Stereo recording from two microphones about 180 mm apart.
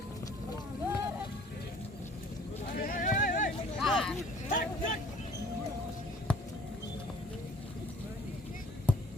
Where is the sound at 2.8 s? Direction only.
50° left (ahead or behind).